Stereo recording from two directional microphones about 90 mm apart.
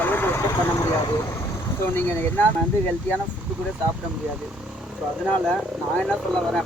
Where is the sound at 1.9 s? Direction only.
25° left (ahead or behind).